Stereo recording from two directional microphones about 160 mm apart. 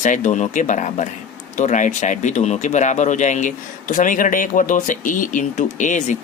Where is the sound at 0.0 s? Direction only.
50° left (ahead or behind).